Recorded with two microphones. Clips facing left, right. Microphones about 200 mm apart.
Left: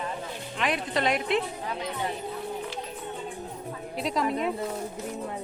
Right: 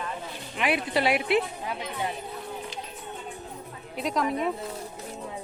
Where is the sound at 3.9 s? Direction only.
Centre (ahead or behind).